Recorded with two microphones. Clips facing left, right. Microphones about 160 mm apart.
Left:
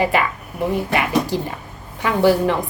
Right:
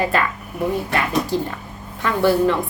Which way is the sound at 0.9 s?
15° left (ahead or behind).